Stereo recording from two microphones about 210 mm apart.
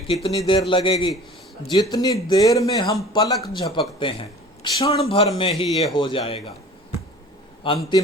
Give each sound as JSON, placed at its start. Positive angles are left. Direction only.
{"t": 0.1, "sound": "a man's voice", "side_deg": 25}
{"t": 7.6, "sound": "a man's voice", "side_deg": 25}